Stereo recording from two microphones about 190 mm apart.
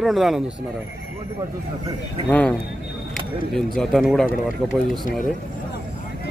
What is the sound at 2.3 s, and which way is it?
Speech, 5° left (ahead or behind).